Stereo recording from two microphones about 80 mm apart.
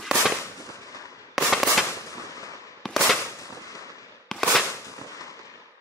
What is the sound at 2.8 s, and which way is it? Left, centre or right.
Firecracker, centre.